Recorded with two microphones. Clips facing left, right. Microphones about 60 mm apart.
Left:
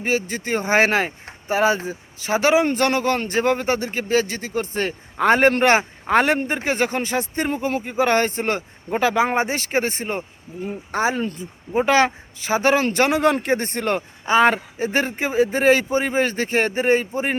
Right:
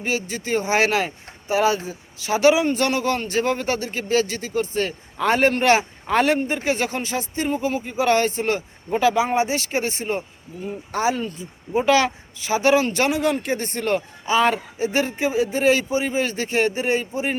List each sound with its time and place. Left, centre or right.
0.0 s speech: left